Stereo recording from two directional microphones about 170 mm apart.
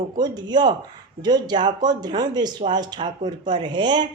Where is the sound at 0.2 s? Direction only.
25° right (ahead or behind).